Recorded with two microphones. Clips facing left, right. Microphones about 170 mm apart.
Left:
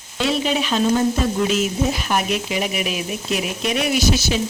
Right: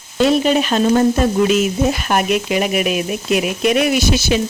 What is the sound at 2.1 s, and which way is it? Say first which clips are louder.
Speech: right 5 dB; 60° right (ahead or behind).